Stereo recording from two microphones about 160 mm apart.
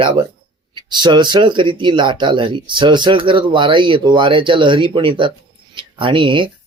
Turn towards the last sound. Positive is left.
turn(degrees=-30)  # may be behind; listen again after turning